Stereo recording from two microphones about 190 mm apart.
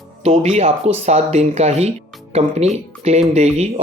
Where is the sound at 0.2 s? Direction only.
35° right (ahead or behind).